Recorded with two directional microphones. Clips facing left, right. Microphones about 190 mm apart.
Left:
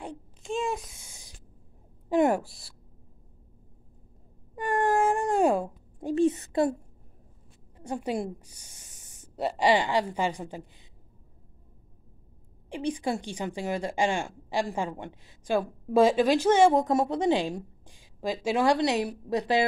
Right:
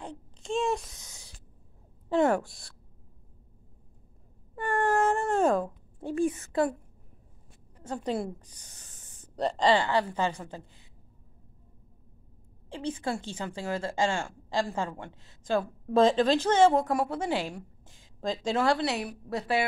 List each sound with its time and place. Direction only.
0.4 s a sound: centre (ahead or behind)
2.4 s speech: 5° left (ahead or behind)
4.6 s wail: 15° left (ahead or behind)
7.7 s speech: 15° left (ahead or behind)
12.6 s a woman's voice: 15° left (ahead or behind)